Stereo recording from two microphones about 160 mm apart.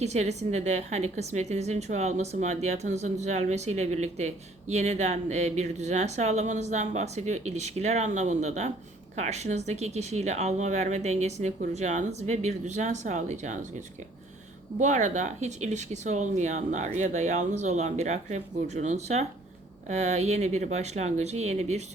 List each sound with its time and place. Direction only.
0.0 s speech: 45° right (ahead or behind)